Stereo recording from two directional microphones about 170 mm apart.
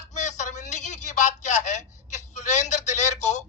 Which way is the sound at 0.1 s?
45° left (ahead or behind).